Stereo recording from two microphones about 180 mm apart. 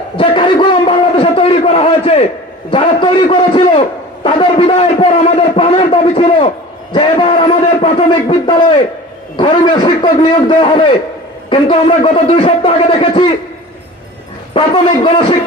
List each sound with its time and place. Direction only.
0.2 s a sound: 25° left (ahead or behind)
2.6 s a man's voice: 30° left (ahead or behind)
14.5 s a man's voice: 25° left (ahead or behind)